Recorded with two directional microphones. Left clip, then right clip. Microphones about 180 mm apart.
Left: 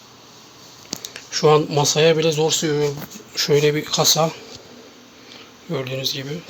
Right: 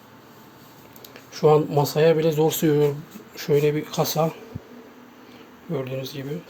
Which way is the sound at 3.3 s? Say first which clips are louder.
Left 4 dB; centre (ahead or behind).